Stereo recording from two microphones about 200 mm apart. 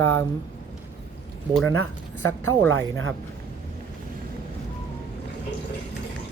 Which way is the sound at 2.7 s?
70° right (ahead or behind).